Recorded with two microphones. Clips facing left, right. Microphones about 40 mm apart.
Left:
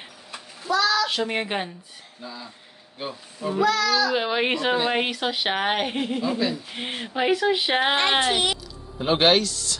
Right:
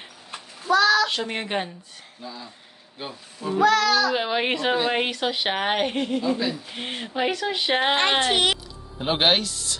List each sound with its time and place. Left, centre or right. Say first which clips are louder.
0.7 s child singing: right 3 dB; right
1.0 s speech: left 1 dB; centre
3.6 s a child's voice: right 3 dB; right
4.0 s speech: even; centre
8.9 s speech: left 2 dB; centre